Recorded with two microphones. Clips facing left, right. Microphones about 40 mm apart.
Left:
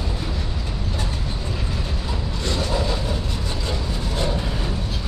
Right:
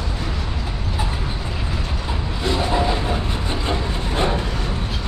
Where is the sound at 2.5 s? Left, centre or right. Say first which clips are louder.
Right 5 dB; right.